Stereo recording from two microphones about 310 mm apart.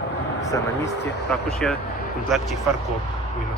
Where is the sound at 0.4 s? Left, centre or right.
Centre.